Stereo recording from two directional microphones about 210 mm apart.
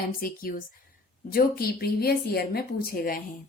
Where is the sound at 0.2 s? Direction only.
45° left (ahead or behind).